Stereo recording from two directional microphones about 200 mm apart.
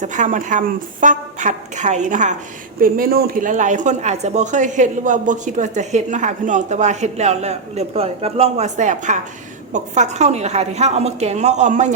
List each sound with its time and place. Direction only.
0.0 s speech: 40° right (ahead or behind)
2.8 s speech: 50° right (ahead or behind)